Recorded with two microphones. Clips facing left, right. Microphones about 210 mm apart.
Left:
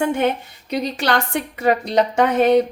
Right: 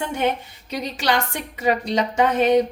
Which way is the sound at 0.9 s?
55° left (ahead or behind).